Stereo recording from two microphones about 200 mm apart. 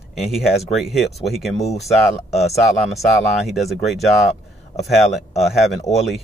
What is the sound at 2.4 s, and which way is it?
Speech, centre (ahead or behind).